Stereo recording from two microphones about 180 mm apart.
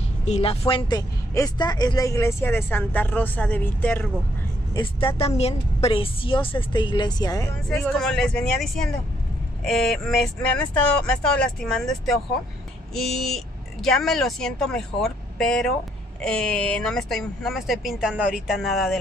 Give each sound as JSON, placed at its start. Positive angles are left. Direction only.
{"t": 0.2, "sound": "a woman's voice", "side_deg": 35}
{"t": 4.7, "sound": "a woman's voice", "side_deg": 30}
{"t": 7.8, "sound": "speech", "side_deg": 5}